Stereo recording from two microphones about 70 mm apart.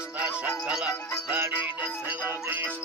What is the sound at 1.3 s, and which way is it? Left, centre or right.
Music, right.